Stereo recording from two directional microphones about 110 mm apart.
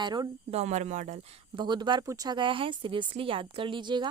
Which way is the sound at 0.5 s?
90° right.